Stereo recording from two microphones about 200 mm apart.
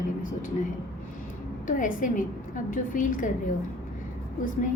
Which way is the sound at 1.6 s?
40° left (ahead or behind).